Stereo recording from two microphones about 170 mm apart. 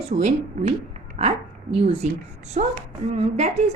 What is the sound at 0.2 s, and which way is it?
A woman's voice, 45° right (ahead or behind).